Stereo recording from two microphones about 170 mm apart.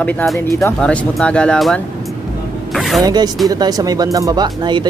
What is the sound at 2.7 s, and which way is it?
Music, centre (ahead or behind).